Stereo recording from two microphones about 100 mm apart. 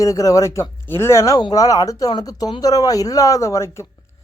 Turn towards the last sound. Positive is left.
turn(degrees=30)  # may be behind; listen again after turning